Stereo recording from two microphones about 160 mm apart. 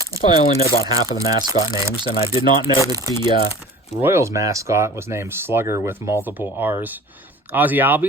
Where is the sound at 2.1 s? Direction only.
35° left (ahead or behind).